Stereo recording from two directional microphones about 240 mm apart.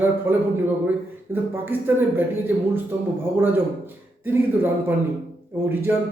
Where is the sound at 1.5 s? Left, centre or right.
Centre.